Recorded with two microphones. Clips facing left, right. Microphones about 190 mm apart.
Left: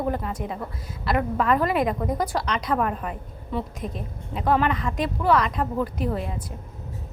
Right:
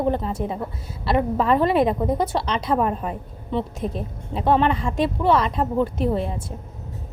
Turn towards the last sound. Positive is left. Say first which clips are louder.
# right 4 dB
turn(degrees=-30)  # may be behind; listen again after turning